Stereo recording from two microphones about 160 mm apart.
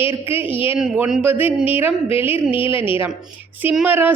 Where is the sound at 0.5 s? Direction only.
35° left (ahead or behind).